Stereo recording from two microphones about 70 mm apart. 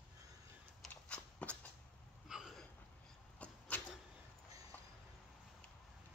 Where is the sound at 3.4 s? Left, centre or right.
Left.